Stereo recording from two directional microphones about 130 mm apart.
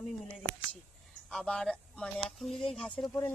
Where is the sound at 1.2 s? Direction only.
5° left (ahead or behind).